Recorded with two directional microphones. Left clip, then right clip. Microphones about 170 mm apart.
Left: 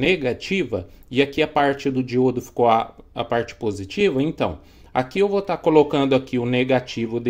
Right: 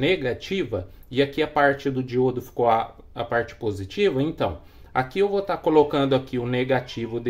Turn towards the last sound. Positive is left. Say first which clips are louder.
# left 3 dB
turn(degrees=30)  # may be behind; listen again after turning